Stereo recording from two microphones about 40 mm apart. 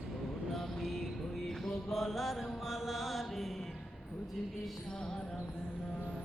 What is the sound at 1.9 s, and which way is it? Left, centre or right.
Mantra, centre.